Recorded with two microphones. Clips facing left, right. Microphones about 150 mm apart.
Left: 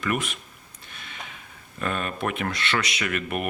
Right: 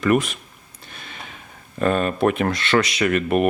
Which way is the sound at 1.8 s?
40° right (ahead or behind).